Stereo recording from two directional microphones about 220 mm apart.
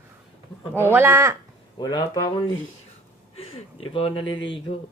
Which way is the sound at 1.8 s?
20° left (ahead or behind).